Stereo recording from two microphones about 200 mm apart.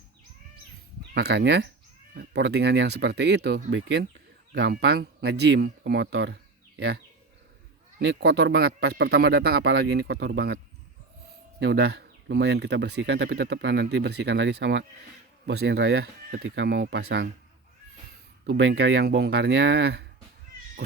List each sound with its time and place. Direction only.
1.1 s speech: 55° right (ahead or behind)
11.6 s speech: 55° right (ahead or behind)
18.4 s speech: 65° right (ahead or behind)